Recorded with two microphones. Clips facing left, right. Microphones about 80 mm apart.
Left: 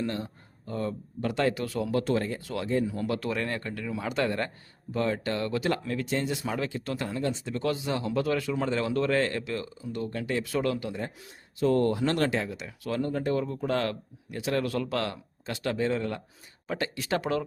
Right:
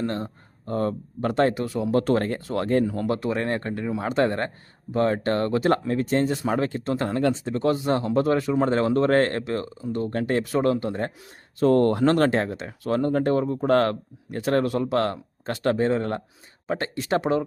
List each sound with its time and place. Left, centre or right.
0.0 s speech: right
1.9 s speech: right
3.2 s speech: right
7.0 s speech: right
7.5 s speech: right
10.4 s speech: right
11.6 s speech: right
13.4 s speech: right
13.7 s speech: right
14.7 s speech: right
15.0 s speech: right
16.6 s speech: right